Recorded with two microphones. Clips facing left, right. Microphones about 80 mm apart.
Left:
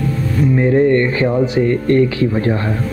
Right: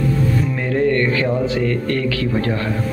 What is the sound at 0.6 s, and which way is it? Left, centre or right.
Speech, left.